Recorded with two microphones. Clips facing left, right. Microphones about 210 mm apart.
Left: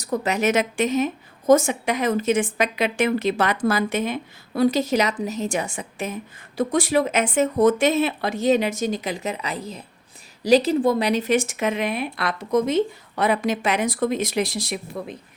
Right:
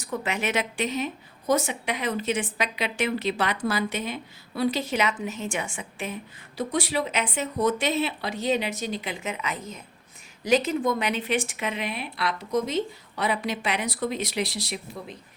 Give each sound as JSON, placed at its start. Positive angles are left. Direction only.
{"t": 0.0, "sound": "a woman's voice", "side_deg": 40}